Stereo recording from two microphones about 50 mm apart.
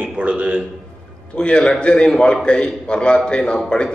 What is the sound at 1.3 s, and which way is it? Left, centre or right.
A man's voice, centre.